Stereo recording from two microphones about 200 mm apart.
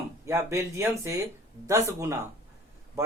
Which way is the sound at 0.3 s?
15° right (ahead or behind).